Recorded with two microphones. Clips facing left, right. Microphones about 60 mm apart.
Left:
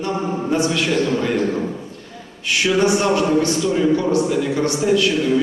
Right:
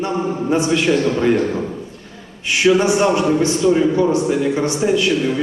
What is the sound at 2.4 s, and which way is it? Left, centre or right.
A man's voice, right.